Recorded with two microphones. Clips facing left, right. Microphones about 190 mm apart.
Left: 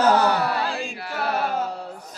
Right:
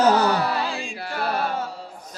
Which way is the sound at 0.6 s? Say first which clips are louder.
Left 1 dB; centre (ahead or behind).